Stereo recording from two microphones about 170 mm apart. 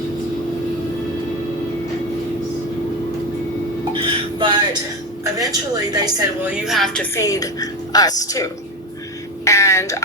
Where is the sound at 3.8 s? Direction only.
25° right (ahead or behind).